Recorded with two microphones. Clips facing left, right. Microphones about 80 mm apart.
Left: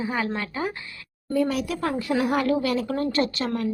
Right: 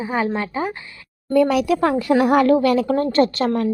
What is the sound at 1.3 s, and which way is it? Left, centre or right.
A woman's voice, right.